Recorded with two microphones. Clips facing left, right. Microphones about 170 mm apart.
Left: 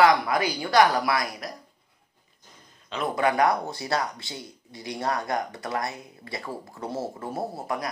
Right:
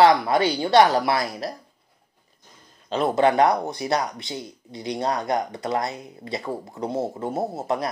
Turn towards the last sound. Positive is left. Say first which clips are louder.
# right 5 dB
turn(degrees=-25)  # may be behind; listen again after turning